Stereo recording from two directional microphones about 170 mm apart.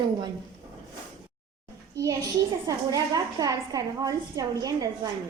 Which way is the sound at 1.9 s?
20° right (ahead or behind).